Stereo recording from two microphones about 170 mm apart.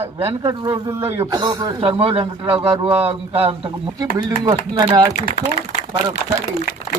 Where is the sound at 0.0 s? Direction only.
35° right (ahead or behind).